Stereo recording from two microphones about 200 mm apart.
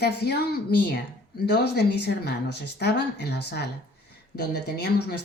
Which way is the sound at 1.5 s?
55° left (ahead or behind).